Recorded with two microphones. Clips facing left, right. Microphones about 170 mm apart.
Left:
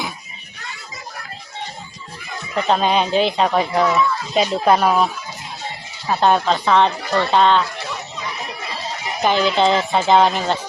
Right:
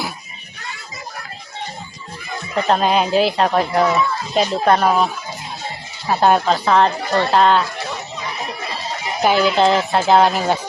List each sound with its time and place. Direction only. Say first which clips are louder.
2.6 s speech: right 1 dB; centre (ahead or behind)
6.1 s speech: right 1 dB; 5° right (ahead or behind)
9.2 s speech: right 2 dB; 5° right (ahead or behind)